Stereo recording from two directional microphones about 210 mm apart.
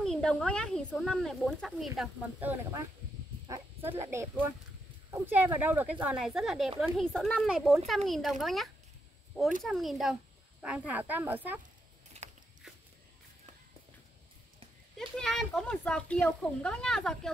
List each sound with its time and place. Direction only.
0.0 s speech: centre (ahead or behind)
3.4 s speech: 10° right (ahead or behind)
12.2 s biting: 30° right (ahead or behind)
15.0 s speech: centre (ahead or behind)